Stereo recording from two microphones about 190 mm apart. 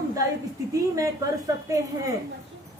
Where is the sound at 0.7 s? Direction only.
15° right (ahead or behind).